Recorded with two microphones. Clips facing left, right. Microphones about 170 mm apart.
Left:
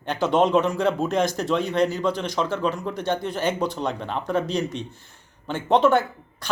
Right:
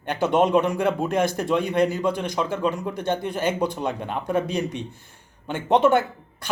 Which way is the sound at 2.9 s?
55° right (ahead or behind).